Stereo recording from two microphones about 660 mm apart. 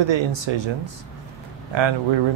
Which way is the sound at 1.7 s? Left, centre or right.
Right.